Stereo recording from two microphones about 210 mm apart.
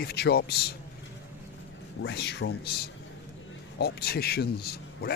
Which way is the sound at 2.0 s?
55° left (ahead or behind).